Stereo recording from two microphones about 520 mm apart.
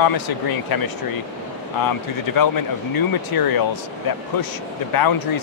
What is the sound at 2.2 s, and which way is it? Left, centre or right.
Speech, left.